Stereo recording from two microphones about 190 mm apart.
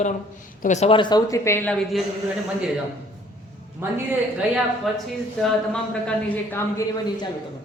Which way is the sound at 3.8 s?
10° right (ahead or behind).